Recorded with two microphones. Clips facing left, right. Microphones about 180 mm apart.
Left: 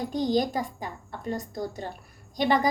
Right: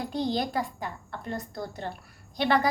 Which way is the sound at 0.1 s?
15° left (ahead or behind).